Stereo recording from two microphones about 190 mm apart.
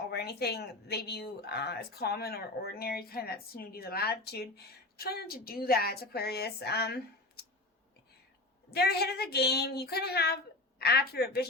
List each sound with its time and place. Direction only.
0.1 s speech: 55° left (ahead or behind)
8.7 s speech: 55° left (ahead or behind)